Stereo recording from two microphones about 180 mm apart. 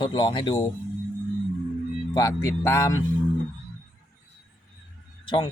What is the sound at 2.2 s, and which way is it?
Speech, 15° left (ahead or behind).